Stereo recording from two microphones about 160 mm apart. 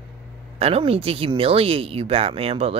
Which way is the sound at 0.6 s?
35° right (ahead or behind).